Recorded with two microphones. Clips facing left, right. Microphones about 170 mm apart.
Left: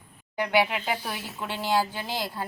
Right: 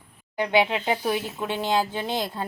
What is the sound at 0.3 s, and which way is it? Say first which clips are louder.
A woman's voice: right 2 dB; 20° right (ahead or behind).